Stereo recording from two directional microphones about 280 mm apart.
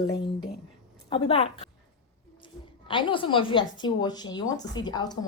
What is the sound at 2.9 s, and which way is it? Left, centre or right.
A woman's voice, centre.